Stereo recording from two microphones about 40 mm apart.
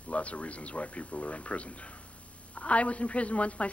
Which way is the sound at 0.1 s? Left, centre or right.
Left.